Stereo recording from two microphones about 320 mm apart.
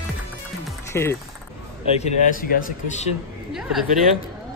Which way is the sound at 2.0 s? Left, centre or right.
Left.